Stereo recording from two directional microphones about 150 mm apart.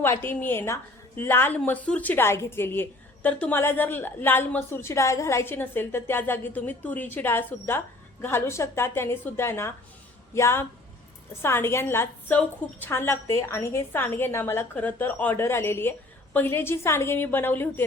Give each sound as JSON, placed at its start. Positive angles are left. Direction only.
{"t": 0.0, "sound": "a woman's voice", "side_deg": 15}